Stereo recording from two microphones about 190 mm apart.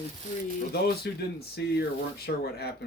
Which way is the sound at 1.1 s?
55° left (ahead or behind).